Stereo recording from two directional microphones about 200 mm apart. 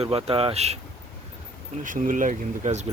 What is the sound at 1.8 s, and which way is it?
Speech, 40° right (ahead or behind).